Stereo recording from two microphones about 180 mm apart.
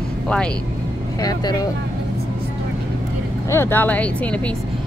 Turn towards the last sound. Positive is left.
turn(degrees=10)  # may be behind; listen again after turning